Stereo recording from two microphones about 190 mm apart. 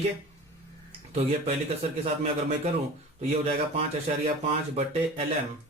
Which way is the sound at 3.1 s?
35° right (ahead or behind).